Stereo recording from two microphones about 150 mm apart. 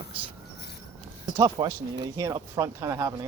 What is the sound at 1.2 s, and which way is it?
Speech, 25° right (ahead or behind).